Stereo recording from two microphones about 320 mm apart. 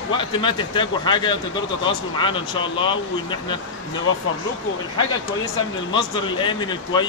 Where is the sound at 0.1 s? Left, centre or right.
Centre.